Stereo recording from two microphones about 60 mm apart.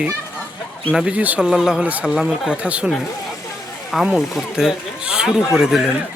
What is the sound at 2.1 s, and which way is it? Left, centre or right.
Speech, centre.